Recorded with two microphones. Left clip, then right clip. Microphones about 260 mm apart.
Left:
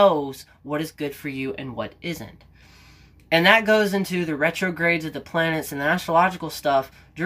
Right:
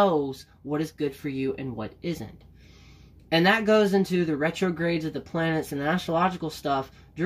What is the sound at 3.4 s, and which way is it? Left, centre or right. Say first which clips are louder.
Speech: left 4 dB; centre.